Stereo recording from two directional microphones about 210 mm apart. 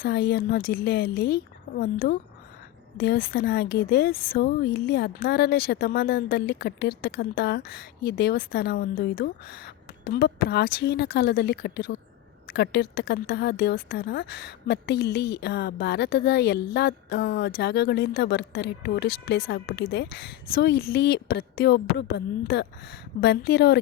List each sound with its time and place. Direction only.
0.0 s a woman's voice: 50° left (ahead or behind)